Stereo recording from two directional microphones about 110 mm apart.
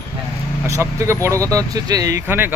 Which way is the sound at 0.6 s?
25° right (ahead or behind).